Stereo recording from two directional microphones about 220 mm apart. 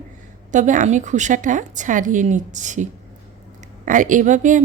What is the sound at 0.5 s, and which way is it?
Speech, 35° right (ahead or behind).